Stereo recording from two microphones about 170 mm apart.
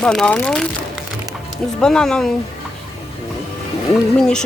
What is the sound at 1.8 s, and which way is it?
Speech, 5° left (ahead or behind).